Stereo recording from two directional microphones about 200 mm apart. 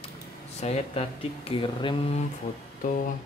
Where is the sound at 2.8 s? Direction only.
45° left (ahead or behind).